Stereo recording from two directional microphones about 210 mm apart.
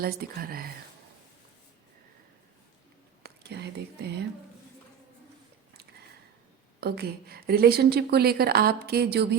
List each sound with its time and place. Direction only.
0.0 s a woman's voice: 45° right (ahead or behind)
3.2 s speech: 50° right (ahead or behind)
6.7 s a woman's voice: 50° right (ahead or behind)